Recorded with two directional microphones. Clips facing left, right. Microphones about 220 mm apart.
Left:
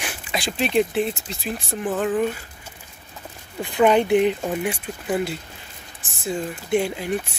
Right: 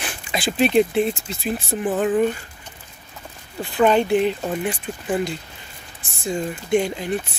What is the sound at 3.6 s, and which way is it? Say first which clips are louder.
Speech: even; 20° left (ahead or behind).